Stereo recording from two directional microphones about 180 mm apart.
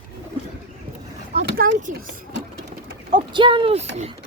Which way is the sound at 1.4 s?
65° right (ahead or behind).